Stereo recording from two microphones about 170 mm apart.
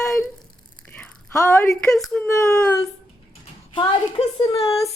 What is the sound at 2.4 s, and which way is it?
Speech, 15° left (ahead or behind).